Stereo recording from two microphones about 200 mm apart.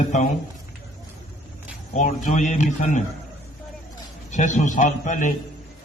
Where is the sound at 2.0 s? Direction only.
40° left (ahead or behind).